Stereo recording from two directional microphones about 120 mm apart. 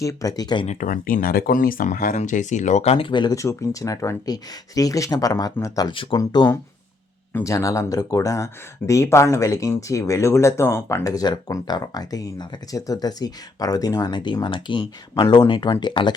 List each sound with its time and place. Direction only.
0.0 s speech: 25° left (ahead or behind)
0.7 s speech: 90° left; by 3.1 s 60° left (ahead or behind)
3.1 s speech: 40° left (ahead or behind)
3.3 s speech: 25° left (ahead or behind)
5.9 s speech: 45° left (ahead or behind)
6.1 s speech: 35° left (ahead or behind)